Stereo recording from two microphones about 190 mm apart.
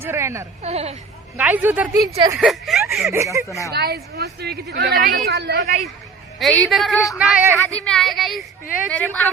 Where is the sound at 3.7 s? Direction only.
55° right (ahead or behind).